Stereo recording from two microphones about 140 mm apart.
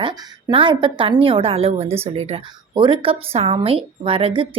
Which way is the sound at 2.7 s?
35° right (ahead or behind).